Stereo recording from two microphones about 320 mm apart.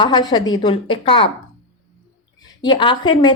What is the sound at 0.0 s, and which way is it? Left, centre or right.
Speech, centre.